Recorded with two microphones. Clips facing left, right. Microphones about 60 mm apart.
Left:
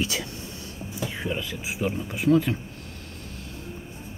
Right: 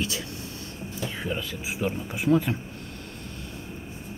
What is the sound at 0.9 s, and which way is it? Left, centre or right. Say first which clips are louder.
Speech: left 1 dB; centre.